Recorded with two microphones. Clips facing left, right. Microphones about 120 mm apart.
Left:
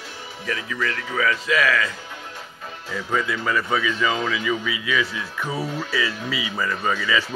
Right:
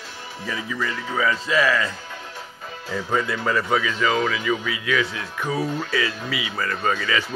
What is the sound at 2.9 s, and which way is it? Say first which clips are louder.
Speech: right 1 dB; 15° right (ahead or behind).